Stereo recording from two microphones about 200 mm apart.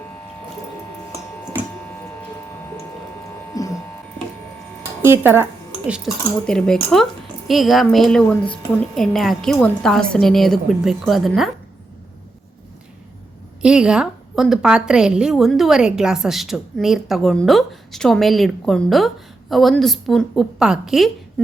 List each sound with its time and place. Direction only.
3.5 s electric shaver: 15° left (ahead or behind)
5.0 s speech: 10° right (ahead or behind)
5.9 s a woman's voice: centre (ahead or behind)
13.6 s a woman's voice: 5° right (ahead or behind)